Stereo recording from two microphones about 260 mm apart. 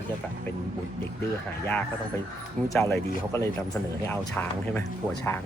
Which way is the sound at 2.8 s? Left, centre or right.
Centre.